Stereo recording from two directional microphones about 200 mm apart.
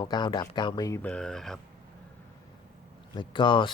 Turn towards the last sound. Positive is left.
turn(degrees=25)  # may be behind; listen again after turning